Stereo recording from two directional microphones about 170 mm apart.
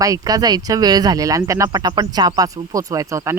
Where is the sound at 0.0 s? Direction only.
20° right (ahead or behind).